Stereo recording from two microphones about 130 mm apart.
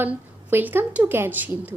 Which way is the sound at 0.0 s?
15° right (ahead or behind).